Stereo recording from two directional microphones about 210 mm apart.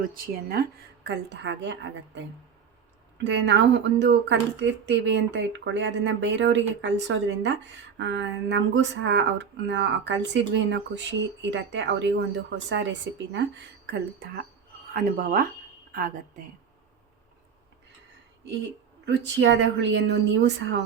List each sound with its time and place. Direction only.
0.6 s speech: 50° right (ahead or behind)
3.2 s a woman's voice: 60° right (ahead or behind); by 16.5 s 40° right (ahead or behind)
19.0 s speech: 60° right (ahead or behind)